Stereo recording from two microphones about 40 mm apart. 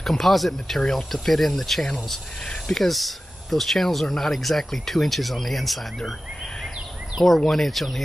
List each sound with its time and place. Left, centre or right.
0.0 s speech: centre
0.7 s speech: centre
1.1 s speech: centre
7.3 s speech: centre